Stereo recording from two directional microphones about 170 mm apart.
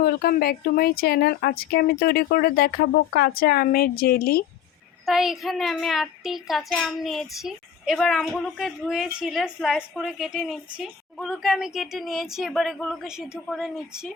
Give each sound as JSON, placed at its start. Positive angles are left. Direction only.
{"t": 0.0, "sound": "speech", "side_deg": 60}
{"t": 5.0, "sound": "a woman's voice", "side_deg": 0}